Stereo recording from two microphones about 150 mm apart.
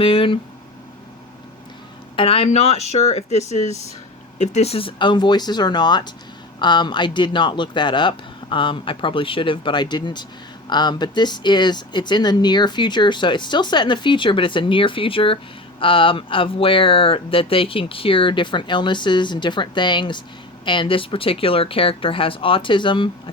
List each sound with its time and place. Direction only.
0.0 s speech: 35° left (ahead or behind)
2.1 s speech: 40° left (ahead or behind)